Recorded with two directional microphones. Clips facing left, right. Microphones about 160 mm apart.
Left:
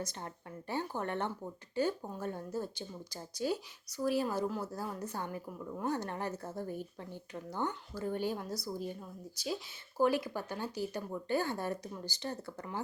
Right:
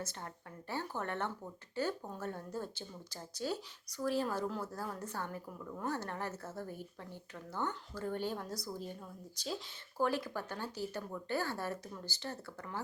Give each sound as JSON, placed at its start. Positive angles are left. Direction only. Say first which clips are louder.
{"t": 0.0, "sound": "a woman's voice", "louder": "left 3 dB", "side_deg": 15}